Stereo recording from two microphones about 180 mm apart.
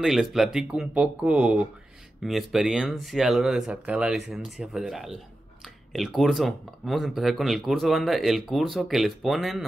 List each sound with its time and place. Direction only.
0.0 s speech: centre (ahead or behind)